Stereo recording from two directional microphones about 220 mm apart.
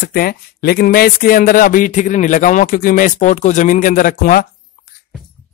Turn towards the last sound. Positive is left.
turn(degrees=40)  # may be behind; listen again after turning